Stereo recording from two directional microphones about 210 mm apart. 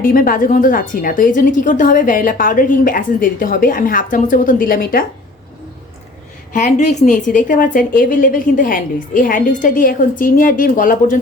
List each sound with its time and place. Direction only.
0.0 s a woman's voice: 40° left (ahead or behind)
6.5 s a woman's voice: 35° left (ahead or behind)